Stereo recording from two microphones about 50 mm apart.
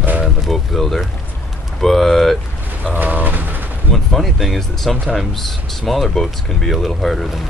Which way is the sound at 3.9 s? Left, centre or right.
Centre.